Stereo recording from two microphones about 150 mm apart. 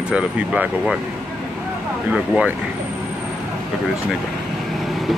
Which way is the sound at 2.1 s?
5° right (ahead or behind).